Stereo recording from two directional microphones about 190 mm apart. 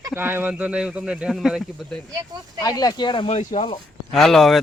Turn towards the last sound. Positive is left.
turn(degrees=0)  # may be behind; listen again after turning